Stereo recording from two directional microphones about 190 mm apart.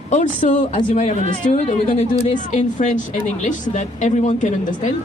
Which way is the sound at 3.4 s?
40° left (ahead or behind).